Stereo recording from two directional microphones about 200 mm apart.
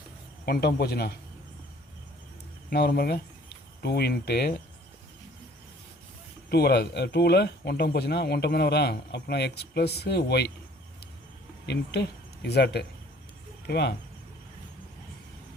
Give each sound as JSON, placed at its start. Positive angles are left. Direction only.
{"t": 0.4, "sound": "a man's voice", "side_deg": 50}
{"t": 2.6, "sound": "a man's voice", "side_deg": 50}
{"t": 6.5, "sound": "speech", "side_deg": 55}
{"t": 11.6, "sound": "speech", "side_deg": 55}